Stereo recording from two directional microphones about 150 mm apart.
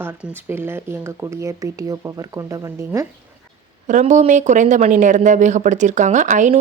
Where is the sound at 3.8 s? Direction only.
55° right (ahead or behind).